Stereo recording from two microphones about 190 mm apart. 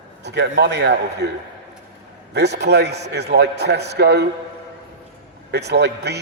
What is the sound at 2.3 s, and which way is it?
A man's voice, 60° right (ahead or behind).